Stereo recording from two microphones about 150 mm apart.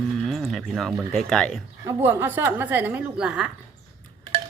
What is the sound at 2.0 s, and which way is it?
A woman's voice, 15° right (ahead or behind).